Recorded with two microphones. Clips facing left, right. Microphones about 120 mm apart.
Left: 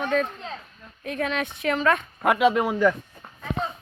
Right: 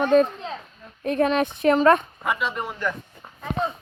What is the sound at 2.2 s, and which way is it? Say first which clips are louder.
Speech: left 7 dB; 65° left (ahead or behind).